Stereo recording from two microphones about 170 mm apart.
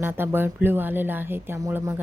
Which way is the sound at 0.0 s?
15° right (ahead or behind).